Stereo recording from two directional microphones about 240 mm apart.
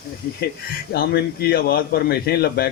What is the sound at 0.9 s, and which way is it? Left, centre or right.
A man's voice, left.